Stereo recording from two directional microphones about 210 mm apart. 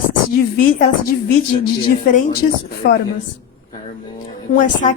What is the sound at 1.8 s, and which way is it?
Speech, 40° left (ahead or behind).